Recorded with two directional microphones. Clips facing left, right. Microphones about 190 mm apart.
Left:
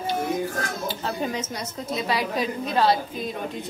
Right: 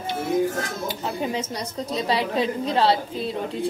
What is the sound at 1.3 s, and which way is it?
A woman's voice, 30° right (ahead or behind).